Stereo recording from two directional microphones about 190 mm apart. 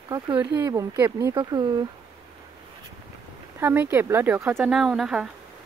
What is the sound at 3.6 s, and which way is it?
Speech, 10° right (ahead or behind).